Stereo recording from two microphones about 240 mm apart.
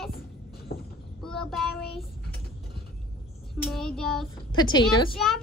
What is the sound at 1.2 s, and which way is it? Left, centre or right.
Child singing, centre.